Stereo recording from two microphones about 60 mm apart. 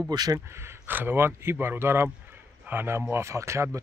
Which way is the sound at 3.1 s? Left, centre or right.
Right.